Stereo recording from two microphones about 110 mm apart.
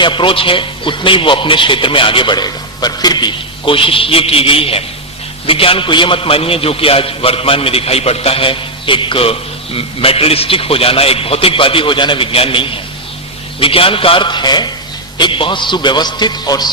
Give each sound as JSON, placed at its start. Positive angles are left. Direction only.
{"t": 0.0, "sound": "a man's voice", "side_deg": 50}